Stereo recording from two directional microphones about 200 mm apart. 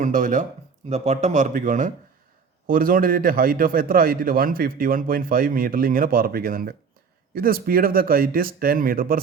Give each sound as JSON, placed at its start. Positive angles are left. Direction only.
{"t": 0.0, "sound": "a man's voice", "side_deg": -40}